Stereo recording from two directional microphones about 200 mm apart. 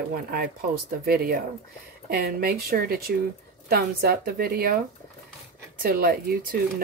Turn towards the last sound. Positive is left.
turn(degrees=-45)  # may be behind; listen again after turning